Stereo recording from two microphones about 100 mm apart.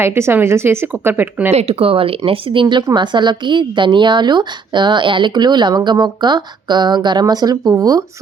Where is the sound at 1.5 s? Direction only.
80° right.